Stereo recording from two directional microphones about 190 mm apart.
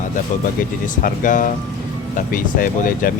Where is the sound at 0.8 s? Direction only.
45° left (ahead or behind).